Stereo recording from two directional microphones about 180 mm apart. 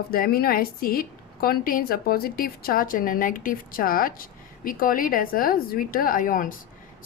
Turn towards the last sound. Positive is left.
turn(degrees=50)  # may be behind; listen again after turning